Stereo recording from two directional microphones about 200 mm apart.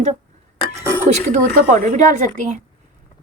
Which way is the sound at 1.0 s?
35° right (ahead or behind).